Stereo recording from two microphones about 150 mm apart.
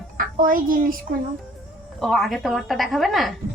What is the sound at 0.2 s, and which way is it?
Speech, 70° right (ahead or behind).